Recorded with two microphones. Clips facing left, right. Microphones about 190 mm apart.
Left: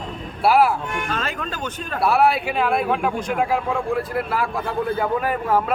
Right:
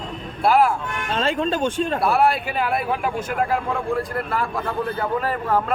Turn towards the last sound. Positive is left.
turn(degrees=10)  # may be behind; listen again after turning